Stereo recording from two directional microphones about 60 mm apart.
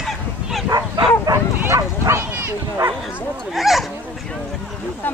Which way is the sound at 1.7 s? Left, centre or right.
Right.